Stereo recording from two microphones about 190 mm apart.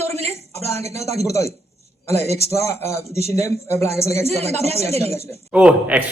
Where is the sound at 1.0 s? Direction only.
15° left (ahead or behind).